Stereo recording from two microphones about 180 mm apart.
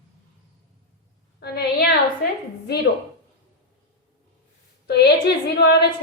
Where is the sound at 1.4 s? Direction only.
65° left (ahead or behind).